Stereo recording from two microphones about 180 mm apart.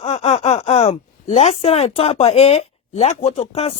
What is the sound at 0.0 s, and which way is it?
A woman's voice, 35° left (ahead or behind).